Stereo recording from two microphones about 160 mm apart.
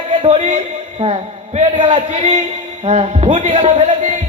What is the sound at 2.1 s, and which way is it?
A man's voice, 45° right (ahead or behind).